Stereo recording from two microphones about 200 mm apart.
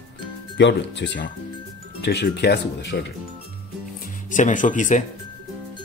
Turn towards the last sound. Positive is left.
turn(degrees=40)  # may be behind; listen again after turning